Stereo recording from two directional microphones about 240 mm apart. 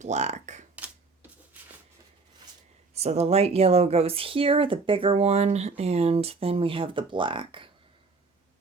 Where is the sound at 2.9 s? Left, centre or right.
Right.